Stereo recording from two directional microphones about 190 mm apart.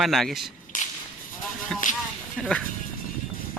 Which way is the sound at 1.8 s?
45° left (ahead or behind).